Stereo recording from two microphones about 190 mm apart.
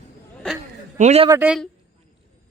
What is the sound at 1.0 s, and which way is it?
Speech, 35° right (ahead or behind).